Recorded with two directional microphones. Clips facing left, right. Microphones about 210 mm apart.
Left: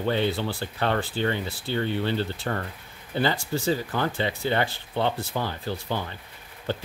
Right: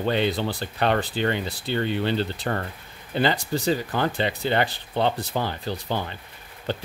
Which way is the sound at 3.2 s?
15° right (ahead or behind).